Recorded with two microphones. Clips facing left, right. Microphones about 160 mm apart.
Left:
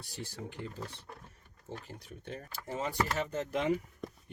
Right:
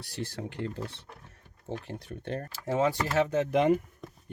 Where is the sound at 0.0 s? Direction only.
80° right.